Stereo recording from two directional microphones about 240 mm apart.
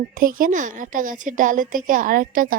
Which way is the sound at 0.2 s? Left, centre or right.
Right.